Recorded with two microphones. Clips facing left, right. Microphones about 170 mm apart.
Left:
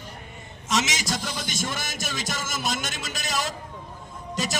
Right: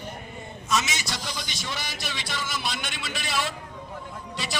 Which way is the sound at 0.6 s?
90° left.